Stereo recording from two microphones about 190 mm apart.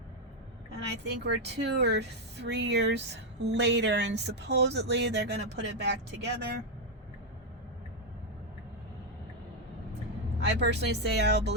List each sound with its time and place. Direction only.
1.0 s speech: 65° right (ahead or behind)
10.4 s speech: 65° right (ahead or behind)